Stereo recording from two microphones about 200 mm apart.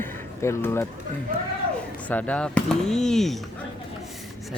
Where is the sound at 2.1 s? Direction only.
5° left (ahead or behind).